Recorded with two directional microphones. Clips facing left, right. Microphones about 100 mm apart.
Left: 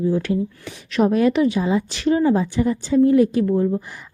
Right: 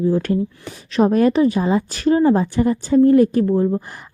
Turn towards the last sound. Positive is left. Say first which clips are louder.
# right 2 dB
turn(degrees=-30)  # may be behind; listen again after turning